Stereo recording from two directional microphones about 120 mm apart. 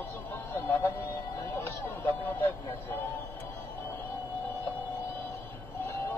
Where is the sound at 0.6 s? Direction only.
20° left (ahead or behind).